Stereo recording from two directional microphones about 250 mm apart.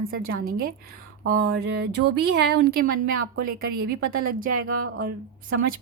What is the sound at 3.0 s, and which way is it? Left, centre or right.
Speech, right.